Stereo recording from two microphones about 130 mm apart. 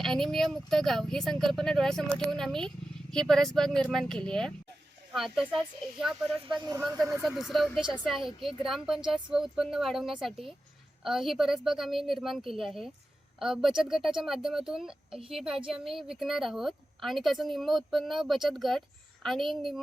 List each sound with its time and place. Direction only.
0.0 s speech: 5° left (ahead or behind)
6.5 s speech: 35° right (ahead or behind)
7.3 s speech: centre (ahead or behind)